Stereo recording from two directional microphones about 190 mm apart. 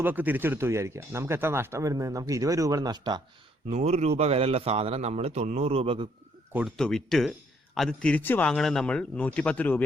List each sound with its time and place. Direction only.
0.0 s speech: 10° right (ahead or behind)
3.7 s a man's voice: 35° right (ahead or behind)
6.5 s speech: 5° right (ahead or behind)